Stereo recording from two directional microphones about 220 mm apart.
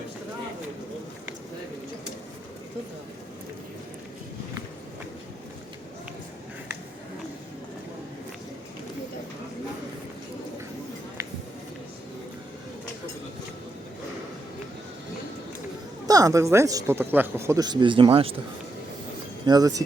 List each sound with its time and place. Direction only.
16.0 s speech: 15° right (ahead or behind)
19.5 s speech: 15° right (ahead or behind)